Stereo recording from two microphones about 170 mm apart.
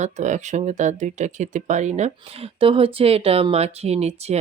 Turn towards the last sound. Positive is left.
turn(degrees=-40)  # may be behind; listen again after turning